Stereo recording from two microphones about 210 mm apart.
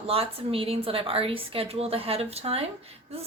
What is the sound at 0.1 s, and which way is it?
A woman's voice, 25° right (ahead or behind).